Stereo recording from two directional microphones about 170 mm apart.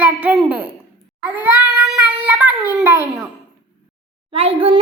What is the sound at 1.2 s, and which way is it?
Child singing, 10° right (ahead or behind).